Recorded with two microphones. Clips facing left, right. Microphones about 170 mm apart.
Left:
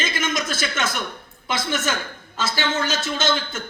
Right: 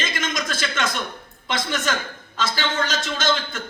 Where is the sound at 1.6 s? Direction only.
25° left (ahead or behind).